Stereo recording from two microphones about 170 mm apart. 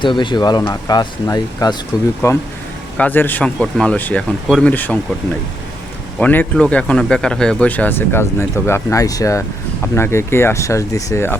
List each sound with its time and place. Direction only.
0.0 s speech: 30° left (ahead or behind)
3.0 s speech: 10° left (ahead or behind)
6.1 s speech: 10° left (ahead or behind)